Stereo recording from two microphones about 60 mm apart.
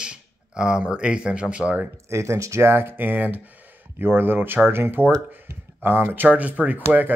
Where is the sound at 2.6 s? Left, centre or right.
Right.